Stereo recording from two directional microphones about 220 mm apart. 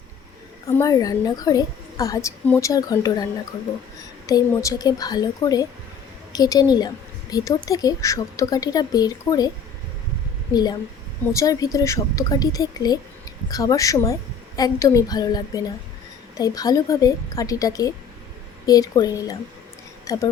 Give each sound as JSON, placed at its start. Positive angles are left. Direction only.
{"t": 0.8, "sound": "speech", "side_deg": 15}
{"t": 4.3, "sound": "speech", "side_deg": 15}
{"t": 10.5, "sound": "a woman's voice", "side_deg": 20}